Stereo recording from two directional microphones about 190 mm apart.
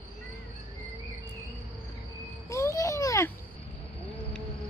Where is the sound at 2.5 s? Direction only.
15° left (ahead or behind).